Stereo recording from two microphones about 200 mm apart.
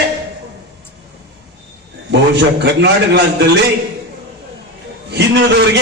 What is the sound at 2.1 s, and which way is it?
Speech, 60° right (ahead or behind).